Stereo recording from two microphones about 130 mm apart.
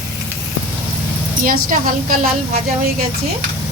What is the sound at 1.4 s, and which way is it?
Speech, 90° right.